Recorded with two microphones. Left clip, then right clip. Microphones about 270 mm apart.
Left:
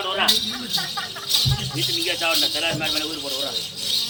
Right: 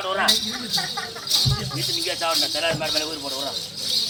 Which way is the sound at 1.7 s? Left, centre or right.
Right.